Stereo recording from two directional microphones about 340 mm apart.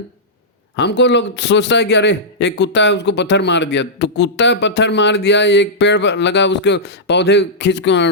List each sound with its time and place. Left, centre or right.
0.8 s a man's voice: left